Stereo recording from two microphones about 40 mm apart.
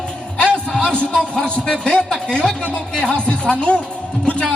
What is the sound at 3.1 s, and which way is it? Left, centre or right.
Music, left.